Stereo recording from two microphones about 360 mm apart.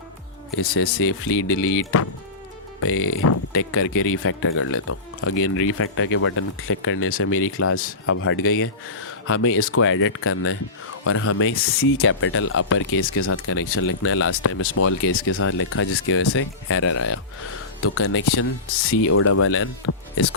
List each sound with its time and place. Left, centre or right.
0.5 s speech: left
2.8 s speech: left
7.3 s speech: left
8.0 s speech: left